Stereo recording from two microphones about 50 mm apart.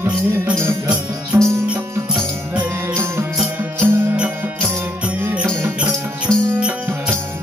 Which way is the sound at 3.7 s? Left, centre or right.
Right.